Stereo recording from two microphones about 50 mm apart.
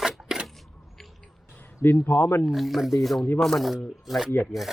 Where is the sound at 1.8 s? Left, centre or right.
Left.